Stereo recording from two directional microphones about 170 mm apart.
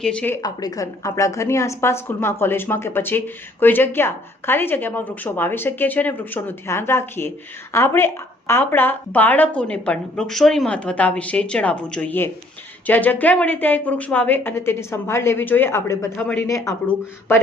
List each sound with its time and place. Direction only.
0.0 s a woman's voice: 5° left (ahead or behind)
0.4 s a woman's voice: 20° left (ahead or behind)